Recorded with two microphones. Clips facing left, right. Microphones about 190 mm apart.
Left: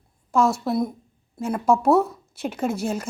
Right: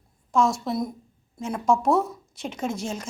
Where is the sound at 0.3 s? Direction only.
5° left (ahead or behind).